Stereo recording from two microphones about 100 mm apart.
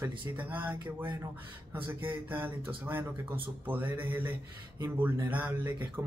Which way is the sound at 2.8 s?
20° right (ahead or behind).